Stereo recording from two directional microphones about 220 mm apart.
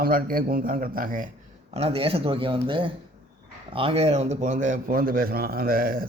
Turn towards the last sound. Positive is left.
turn(degrees=-45)  # may be behind; listen again after turning